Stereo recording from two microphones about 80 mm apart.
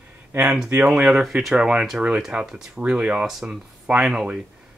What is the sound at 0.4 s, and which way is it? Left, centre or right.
Speech, centre.